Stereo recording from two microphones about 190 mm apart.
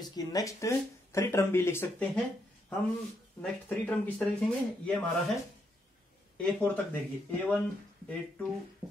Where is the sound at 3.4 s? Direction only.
10° left (ahead or behind).